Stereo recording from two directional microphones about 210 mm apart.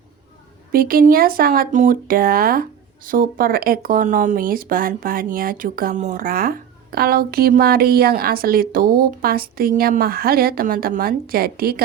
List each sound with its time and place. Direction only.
0.7 s speech: 45° right (ahead or behind)